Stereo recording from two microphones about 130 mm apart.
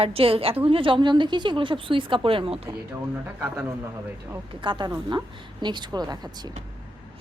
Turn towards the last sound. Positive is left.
turn(degrees=-30)  # may be behind; listen again after turning